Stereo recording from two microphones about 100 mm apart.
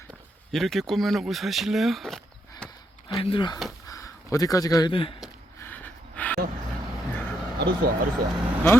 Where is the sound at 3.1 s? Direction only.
60° left (ahead or behind).